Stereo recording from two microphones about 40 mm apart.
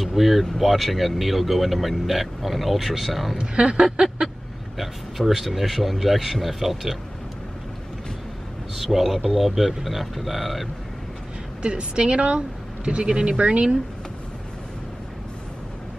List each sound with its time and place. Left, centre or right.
0.0 s speech: centre
3.3 s a woman's voice: right
4.7 s speech: centre
8.7 s speech: centre
11.6 s a woman's voice: right